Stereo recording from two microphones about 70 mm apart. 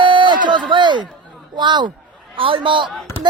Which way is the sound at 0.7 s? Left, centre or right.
Right.